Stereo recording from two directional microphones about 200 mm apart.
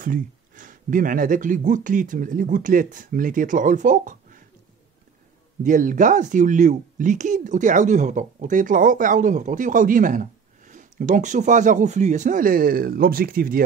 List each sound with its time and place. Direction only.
0.0 s speech: 40° right (ahead or behind)
5.6 s speech: 40° right (ahead or behind)